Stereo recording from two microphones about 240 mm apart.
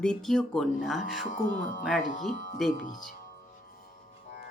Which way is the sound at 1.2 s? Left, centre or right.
Left.